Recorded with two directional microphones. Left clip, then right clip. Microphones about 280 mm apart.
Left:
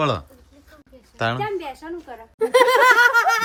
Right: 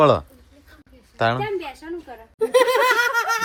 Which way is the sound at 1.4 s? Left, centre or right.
Centre.